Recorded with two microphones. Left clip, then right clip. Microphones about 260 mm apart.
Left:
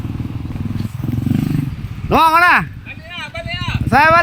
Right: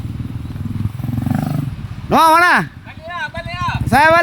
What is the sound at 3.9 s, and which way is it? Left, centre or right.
Speech, centre.